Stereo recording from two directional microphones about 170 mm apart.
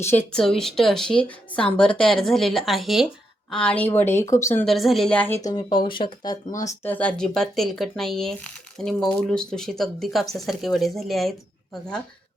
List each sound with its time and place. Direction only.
0.3 s speech: 5° left (ahead or behind)
4.6 s speech: centre (ahead or behind)
5.4 s speech: 20° left (ahead or behind)
6.6 s speech: 15° left (ahead or behind)